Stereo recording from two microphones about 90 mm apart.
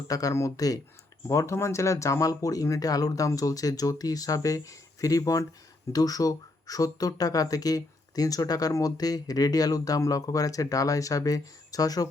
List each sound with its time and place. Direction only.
0.1 s speech: 40° left (ahead or behind)